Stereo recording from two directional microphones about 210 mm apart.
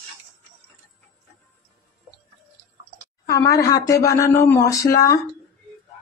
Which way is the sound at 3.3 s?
15° left (ahead or behind).